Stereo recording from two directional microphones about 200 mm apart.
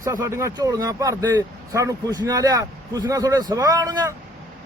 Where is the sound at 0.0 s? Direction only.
15° right (ahead or behind).